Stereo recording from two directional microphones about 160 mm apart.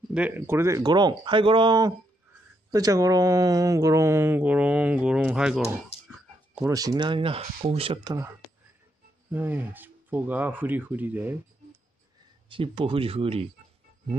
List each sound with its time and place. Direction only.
0.1 s speech: 10° right (ahead or behind)
6.7 s speech: 20° right (ahead or behind)
9.3 s speech: 10° right (ahead or behind)
12.4 s speech: 35° right (ahead or behind)